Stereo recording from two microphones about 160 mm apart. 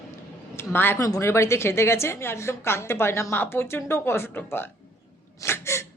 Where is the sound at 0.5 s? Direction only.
15° left (ahead or behind).